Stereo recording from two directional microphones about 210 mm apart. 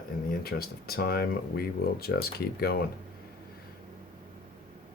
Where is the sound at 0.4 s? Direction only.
45° left (ahead or behind).